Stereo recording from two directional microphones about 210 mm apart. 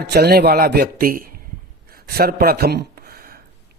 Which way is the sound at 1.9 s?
45° right (ahead or behind).